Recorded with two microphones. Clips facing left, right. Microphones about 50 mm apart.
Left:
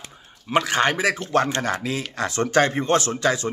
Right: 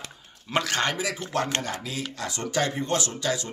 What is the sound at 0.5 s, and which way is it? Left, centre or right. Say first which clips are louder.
Speech: left 6 dB; centre.